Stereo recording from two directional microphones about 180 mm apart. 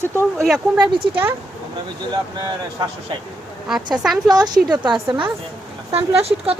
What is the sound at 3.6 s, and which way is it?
Speech, centre (ahead or behind).